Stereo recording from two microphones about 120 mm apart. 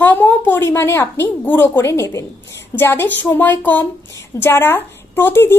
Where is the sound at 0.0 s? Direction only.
15° left (ahead or behind).